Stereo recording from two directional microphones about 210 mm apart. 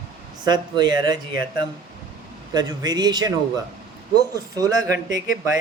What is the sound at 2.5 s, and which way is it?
Speech, 20° right (ahead or behind).